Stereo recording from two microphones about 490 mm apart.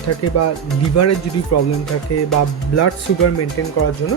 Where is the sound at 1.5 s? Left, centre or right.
Left.